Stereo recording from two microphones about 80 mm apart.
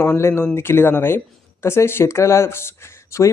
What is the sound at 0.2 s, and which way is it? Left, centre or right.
Speech, left.